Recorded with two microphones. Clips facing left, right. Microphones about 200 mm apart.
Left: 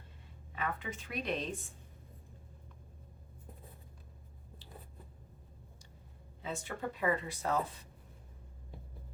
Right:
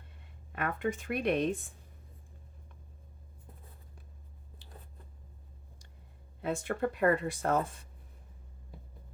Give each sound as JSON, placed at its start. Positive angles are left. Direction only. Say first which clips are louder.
{"t": 0.5, "sound": "speech", "louder": "right 6 dB", "side_deg": -55}
{"t": 6.4, "sound": "speech", "louder": "right 7 dB", "side_deg": -55}